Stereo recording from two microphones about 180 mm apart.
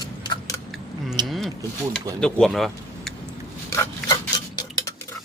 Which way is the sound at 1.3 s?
Centre (ahead or behind).